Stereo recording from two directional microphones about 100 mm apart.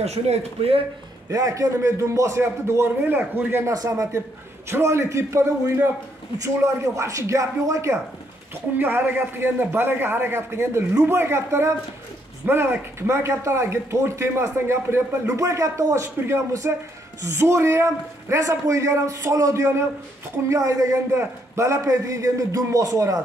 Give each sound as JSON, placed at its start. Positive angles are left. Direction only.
{"t": 0.0, "sound": "a man's voice", "side_deg": -90}
{"t": 1.3, "sound": "speech", "side_deg": -35}
{"t": 3.6, "sound": "a man's voice", "side_deg": -35}
{"t": 8.7, "sound": "a man's voice", "side_deg": -15}